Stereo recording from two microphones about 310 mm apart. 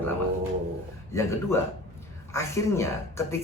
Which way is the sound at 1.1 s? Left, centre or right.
Centre.